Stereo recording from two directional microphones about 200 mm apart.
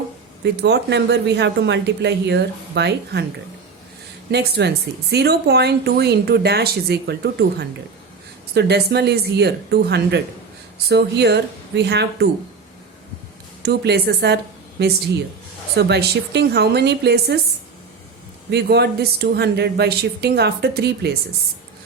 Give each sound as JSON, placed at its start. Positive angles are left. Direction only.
{"t": 0.4, "sound": "speech", "side_deg": -60}
{"t": 4.3, "sound": "speech", "side_deg": -55}
{"t": 13.6, "sound": "speech", "side_deg": -55}
{"t": 15.7, "sound": "speech", "side_deg": -55}
{"t": 18.5, "sound": "speech", "side_deg": -55}